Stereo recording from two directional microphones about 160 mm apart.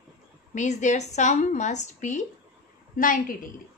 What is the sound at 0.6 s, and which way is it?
A woman's voice, 50° left (ahead or behind).